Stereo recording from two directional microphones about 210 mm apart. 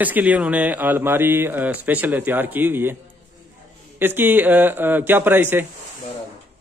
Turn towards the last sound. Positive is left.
turn(degrees=-10)  # may be behind; listen again after turning